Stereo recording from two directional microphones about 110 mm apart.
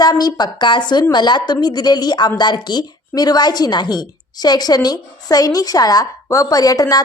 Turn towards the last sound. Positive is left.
turn(degrees=35)  # may be behind; listen again after turning